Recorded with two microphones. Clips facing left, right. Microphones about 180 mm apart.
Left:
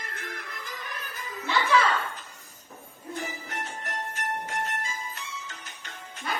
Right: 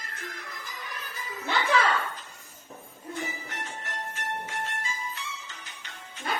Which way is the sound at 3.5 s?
45° left (ahead or behind).